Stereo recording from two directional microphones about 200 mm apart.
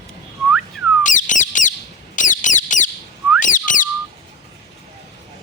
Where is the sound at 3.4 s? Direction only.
40° left (ahead or behind).